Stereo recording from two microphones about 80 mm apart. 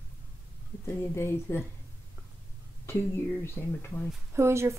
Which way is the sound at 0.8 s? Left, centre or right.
Left.